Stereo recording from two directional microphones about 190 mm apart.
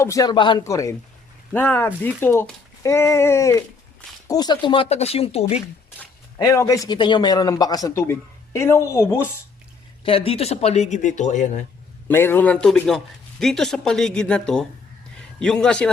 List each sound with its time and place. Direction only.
0.0 s speech: 15° left (ahead or behind); by 5.6 s 35° left (ahead or behind)
6.4 s speech: 15° left (ahead or behind)
10.0 s speech: 30° left (ahead or behind)
12.0 s speech: 10° left (ahead or behind)